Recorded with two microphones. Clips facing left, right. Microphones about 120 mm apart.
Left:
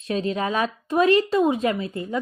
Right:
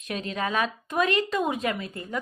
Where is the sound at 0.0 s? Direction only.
30° left (ahead or behind).